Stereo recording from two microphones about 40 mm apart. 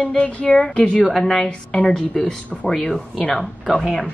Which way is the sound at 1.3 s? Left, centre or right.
Centre.